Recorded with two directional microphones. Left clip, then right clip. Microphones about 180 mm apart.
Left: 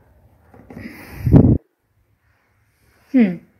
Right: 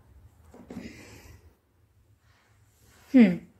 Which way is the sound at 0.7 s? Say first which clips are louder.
Left 8 dB; 35° left (ahead or behind).